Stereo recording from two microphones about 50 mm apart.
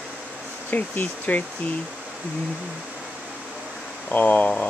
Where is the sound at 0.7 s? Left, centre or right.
Left.